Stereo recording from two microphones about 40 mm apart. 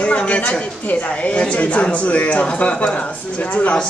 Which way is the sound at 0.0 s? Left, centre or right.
Left.